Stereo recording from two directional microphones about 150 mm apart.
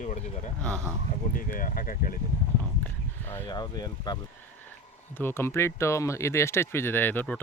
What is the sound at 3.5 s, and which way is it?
Speech, 25° left (ahead or behind).